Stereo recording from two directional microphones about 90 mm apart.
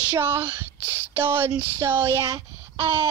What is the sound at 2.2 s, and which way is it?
Speech, 40° right (ahead or behind).